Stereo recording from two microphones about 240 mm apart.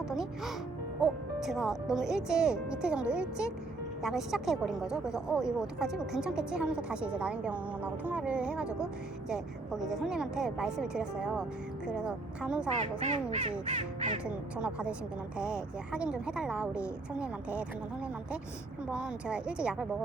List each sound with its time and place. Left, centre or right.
0.1 s speech: centre
13.0 s speech: right
14.3 s speech: centre
18.9 s speech: centre